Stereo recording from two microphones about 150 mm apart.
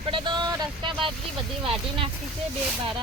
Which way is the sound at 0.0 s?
35° right (ahead or behind).